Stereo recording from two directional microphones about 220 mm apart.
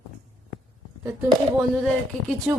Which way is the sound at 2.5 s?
5° right (ahead or behind).